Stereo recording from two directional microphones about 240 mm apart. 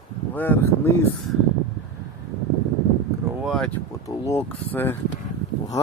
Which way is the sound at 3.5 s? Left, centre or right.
Centre.